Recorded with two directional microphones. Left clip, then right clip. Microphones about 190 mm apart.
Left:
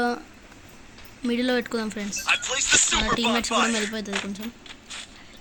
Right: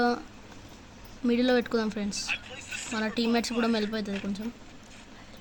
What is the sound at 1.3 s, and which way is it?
Speech, 5° right (ahead or behind).